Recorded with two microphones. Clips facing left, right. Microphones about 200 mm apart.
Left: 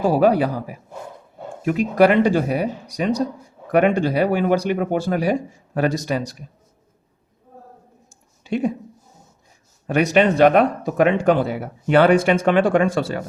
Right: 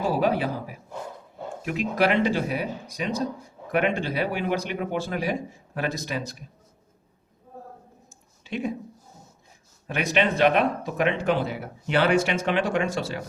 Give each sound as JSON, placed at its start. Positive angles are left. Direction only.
{"t": 0.0, "sound": "speech", "side_deg": 45}
{"t": 8.4, "sound": "a woman's voice", "side_deg": 45}
{"t": 9.8, "sound": "speech", "side_deg": 45}